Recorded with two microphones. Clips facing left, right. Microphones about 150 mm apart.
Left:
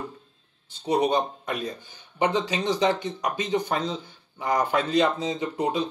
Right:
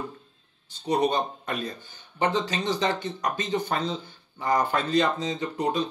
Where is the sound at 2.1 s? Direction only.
15° left (ahead or behind).